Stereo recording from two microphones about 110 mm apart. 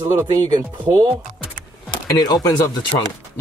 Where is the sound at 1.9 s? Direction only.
40° left (ahead or behind).